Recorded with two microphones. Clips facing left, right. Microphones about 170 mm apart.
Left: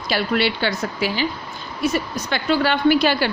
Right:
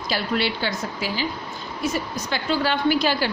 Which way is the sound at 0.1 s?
70° left (ahead or behind).